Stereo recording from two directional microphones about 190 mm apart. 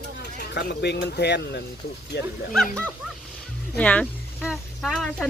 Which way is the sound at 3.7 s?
5° left (ahead or behind).